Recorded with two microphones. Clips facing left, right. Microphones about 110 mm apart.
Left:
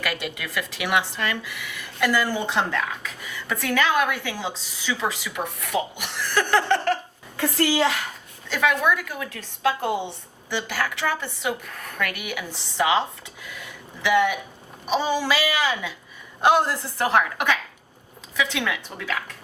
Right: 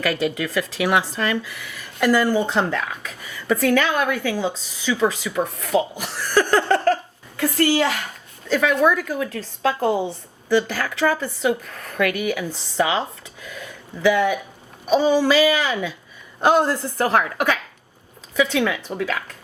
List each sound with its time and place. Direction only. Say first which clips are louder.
0.0 s speech: right 7 dB; 35° right (ahead or behind)
8.4 s speech: right 4 dB; 40° right (ahead or behind)